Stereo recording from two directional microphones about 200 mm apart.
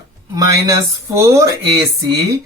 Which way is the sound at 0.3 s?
20° right (ahead or behind).